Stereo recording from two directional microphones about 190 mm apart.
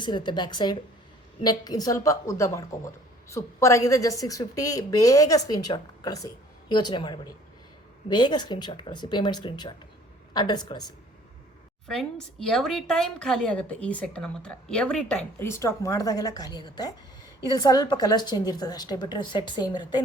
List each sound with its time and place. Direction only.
0.0 s a woman's voice: 25° left (ahead or behind)
11.9 s a woman's voice: centre (ahead or behind); by 20.1 s 25° left (ahead or behind)